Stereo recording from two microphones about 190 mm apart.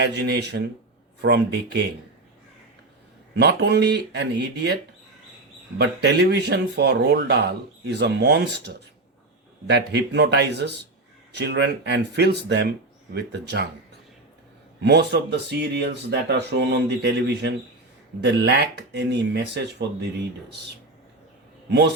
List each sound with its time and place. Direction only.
0.0 s speech: 60° right (ahead or behind)
3.3 s speech: 60° right (ahead or behind)
14.8 s speech: 65° right (ahead or behind)